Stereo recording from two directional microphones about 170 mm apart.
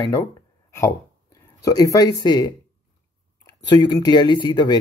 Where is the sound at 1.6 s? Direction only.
20° left (ahead or behind).